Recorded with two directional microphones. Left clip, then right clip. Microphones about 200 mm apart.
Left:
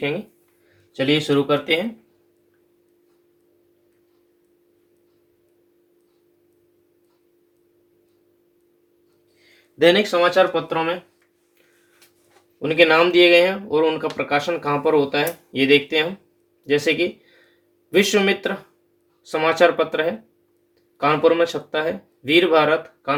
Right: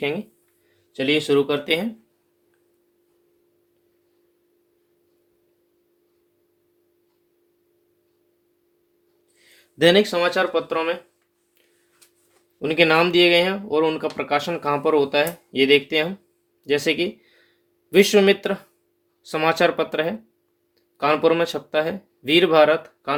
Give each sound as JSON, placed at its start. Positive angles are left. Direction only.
{"t": 0.9, "sound": "speech", "side_deg": -40}
{"t": 9.4, "sound": "speech", "side_deg": -50}
{"t": 12.5, "sound": "speech", "side_deg": -45}